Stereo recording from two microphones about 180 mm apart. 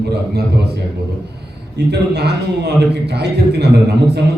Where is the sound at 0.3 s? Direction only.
65° right (ahead or behind).